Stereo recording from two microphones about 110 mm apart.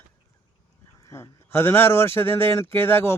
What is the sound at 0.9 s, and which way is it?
A man's voice, 25° left (ahead or behind).